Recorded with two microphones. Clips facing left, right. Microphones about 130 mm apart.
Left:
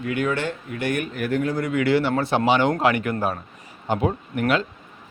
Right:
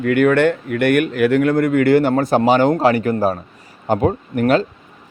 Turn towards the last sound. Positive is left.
turn(degrees=-45)  # may be behind; listen again after turning